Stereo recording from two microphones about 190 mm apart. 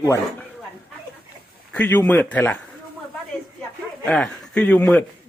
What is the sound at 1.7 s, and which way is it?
Speech, 10° left (ahead or behind).